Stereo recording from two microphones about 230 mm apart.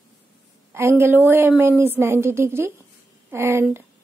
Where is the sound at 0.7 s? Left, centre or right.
Centre.